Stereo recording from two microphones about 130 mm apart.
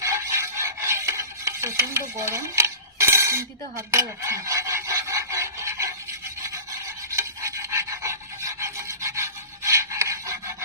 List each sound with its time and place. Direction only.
0.0 s stir: 25° right (ahead or behind)
6.4 s filing: 25° right (ahead or behind)